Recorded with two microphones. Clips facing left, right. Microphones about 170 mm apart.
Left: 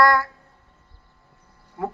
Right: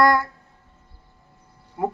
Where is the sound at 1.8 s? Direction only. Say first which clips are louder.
Right 3 dB; 20° right (ahead or behind).